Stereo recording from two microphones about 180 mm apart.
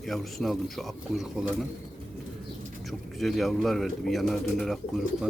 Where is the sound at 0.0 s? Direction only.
Centre (ahead or behind).